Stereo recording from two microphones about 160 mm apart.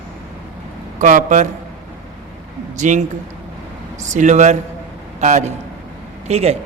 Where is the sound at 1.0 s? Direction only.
55° right (ahead or behind).